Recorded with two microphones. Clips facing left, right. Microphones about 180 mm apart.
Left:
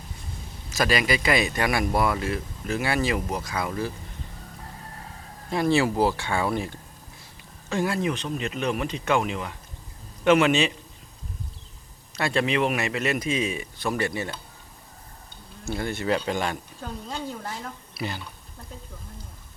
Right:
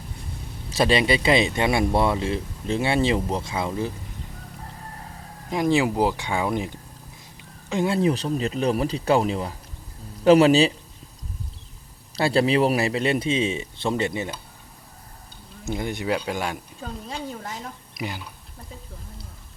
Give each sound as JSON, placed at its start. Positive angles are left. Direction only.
{"t": 0.7, "sound": "speech", "side_deg": -30}
{"t": 5.5, "sound": "speech", "side_deg": -15}
{"t": 7.9, "sound": "speech", "side_deg": -35}
{"t": 12.1, "sound": "speech", "side_deg": -35}
{"t": 15.6, "sound": "a woman's voice", "side_deg": -15}